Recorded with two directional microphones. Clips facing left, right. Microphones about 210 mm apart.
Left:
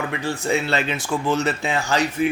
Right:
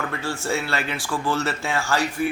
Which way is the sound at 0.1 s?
15° left (ahead or behind).